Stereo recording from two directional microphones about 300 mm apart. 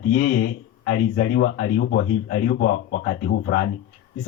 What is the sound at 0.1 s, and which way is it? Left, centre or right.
Speech, left.